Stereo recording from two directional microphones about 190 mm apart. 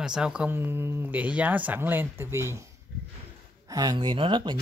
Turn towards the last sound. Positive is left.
turn(degrees=-25)  # may be behind; listen again after turning